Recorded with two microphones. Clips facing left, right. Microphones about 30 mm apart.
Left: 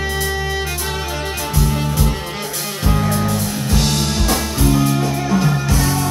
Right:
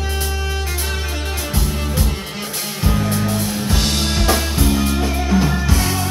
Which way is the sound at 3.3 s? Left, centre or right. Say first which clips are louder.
Left 1 dB; centre.